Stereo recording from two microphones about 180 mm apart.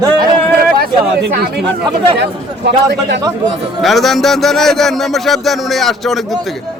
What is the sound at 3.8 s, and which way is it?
A man's voice, centre (ahead or behind).